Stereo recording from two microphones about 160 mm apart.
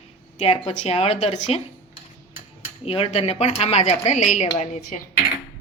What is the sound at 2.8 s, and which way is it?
A woman's voice, 35° left (ahead or behind).